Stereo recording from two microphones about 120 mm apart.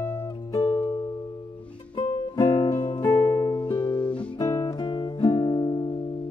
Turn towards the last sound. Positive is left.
turn(degrees=35)  # may be behind; listen again after turning